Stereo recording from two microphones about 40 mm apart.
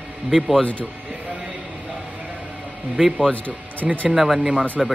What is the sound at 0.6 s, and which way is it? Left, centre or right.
Speech, left.